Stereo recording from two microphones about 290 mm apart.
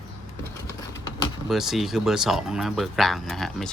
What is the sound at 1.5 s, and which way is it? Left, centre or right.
Speech, centre.